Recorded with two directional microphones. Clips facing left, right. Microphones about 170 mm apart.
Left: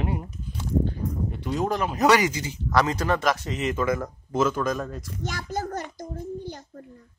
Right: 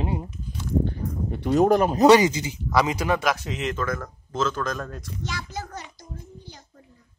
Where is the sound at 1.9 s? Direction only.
25° right (ahead or behind).